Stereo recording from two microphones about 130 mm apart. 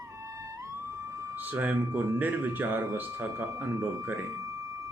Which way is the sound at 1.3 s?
15° right (ahead or behind).